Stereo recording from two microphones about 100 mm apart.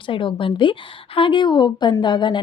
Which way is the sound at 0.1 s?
60° left (ahead or behind).